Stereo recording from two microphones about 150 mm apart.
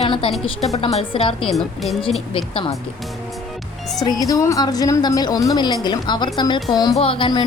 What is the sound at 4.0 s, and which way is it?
A woman's voice, 25° left (ahead or behind).